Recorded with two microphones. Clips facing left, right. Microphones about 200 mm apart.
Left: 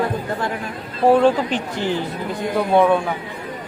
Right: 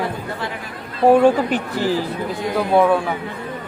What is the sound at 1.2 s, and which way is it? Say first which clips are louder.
Speech: right 2 dB; 10° right (ahead or behind).